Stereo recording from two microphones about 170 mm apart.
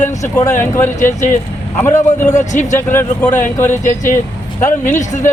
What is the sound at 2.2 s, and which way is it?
Speech, 45° left (ahead or behind).